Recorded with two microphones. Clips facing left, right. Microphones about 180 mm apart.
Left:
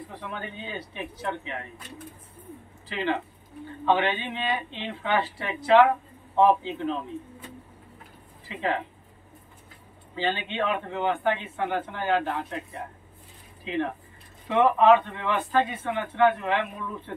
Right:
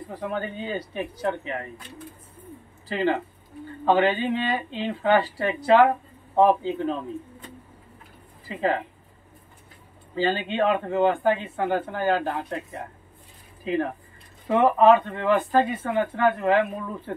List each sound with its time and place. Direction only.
0.2 s speech: 40° right (ahead or behind)
2.9 s speech: 40° right (ahead or behind)
8.5 s speech: 40° right (ahead or behind)
10.1 s speech: 40° right (ahead or behind)
14.5 s speech: 40° right (ahead or behind)